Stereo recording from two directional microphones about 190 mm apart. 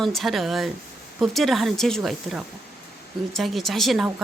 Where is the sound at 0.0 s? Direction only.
Centre (ahead or behind).